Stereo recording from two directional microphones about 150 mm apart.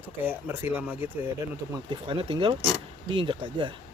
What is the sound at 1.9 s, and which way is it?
Speech, 35° right (ahead or behind).